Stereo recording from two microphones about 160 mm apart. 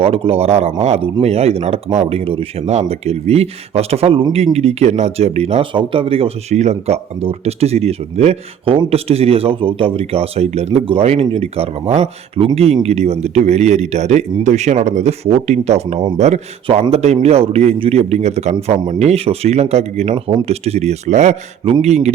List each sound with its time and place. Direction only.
0.0 s speech: 35° right (ahead or behind)